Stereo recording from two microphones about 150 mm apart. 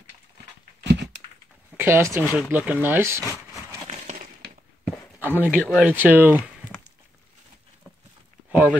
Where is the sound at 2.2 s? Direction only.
Centre (ahead or behind).